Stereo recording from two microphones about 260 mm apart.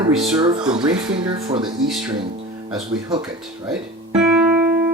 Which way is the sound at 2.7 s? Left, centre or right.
Centre.